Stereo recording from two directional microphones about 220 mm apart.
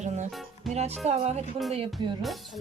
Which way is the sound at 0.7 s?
30° right (ahead or behind).